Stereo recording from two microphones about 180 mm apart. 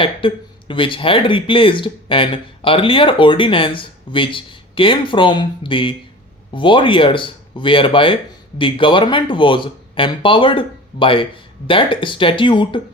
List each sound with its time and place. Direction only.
0.0 s speech: 30° left (ahead or behind)